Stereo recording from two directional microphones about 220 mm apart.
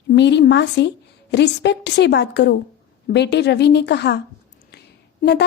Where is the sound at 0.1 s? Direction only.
50° left (ahead or behind).